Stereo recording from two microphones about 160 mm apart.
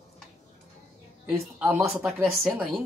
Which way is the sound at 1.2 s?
10° right (ahead or behind).